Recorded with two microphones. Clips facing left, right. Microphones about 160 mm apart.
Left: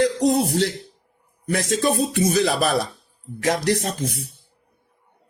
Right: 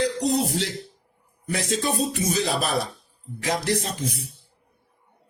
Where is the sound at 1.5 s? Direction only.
55° left (ahead or behind).